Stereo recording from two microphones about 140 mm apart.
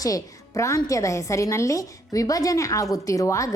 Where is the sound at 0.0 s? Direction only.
25° left (ahead or behind).